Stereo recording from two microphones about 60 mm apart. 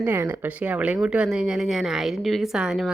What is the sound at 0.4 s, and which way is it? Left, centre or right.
A woman's voice, right.